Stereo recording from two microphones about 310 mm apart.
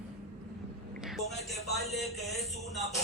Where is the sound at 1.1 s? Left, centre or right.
Centre.